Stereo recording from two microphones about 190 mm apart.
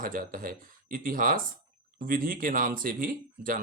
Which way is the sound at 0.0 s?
50° right (ahead or behind).